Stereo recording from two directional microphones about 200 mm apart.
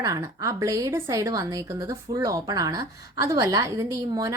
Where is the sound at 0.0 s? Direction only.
15° right (ahead or behind).